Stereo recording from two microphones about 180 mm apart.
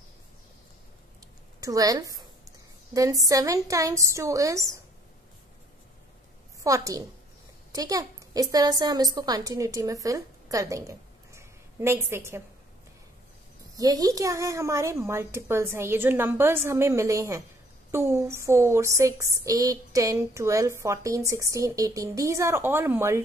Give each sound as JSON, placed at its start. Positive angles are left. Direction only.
{"t": 1.6, "sound": "a woman's voice", "side_deg": -20}
{"t": 6.6, "sound": "a woman's voice", "side_deg": -20}
{"t": 13.7, "sound": "speech", "side_deg": -20}